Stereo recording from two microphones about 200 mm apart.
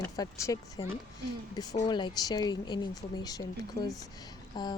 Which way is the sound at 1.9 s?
20° left (ahead or behind).